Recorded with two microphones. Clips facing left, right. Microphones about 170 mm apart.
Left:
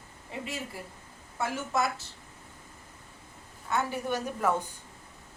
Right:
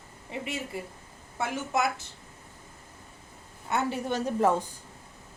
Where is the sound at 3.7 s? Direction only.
25° right (ahead or behind).